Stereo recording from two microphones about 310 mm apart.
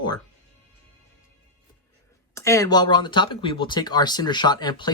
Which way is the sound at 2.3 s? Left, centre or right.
Centre.